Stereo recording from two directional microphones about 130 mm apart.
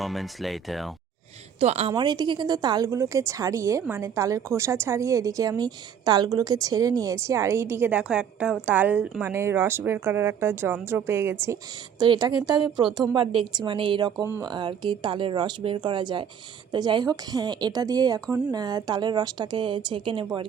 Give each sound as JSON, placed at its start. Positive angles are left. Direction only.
{"t": 0.0, "sound": "speech", "side_deg": 0}
{"t": 1.5, "sound": "speech", "side_deg": -55}
{"t": 1.9, "sound": "a woman's voice", "side_deg": -35}
{"t": 11.9, "sound": "a woman's voice", "side_deg": -35}
{"t": 14.2, "sound": "speech", "side_deg": -20}
{"t": 14.4, "sound": "a woman's voice", "side_deg": -35}